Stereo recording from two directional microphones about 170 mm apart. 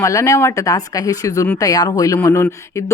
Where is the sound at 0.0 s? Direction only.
20° left (ahead or behind).